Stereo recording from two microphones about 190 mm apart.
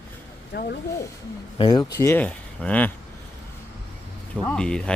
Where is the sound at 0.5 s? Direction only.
60° left (ahead or behind).